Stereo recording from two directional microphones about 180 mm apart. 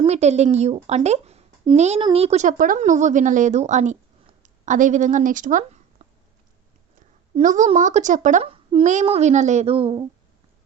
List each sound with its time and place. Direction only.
0.0 s a woman's voice: 35° right (ahead or behind)
7.3 s a woman's voice: 45° right (ahead or behind)